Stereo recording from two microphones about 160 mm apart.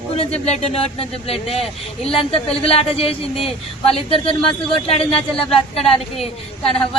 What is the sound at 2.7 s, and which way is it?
Speech, 40° left (ahead or behind).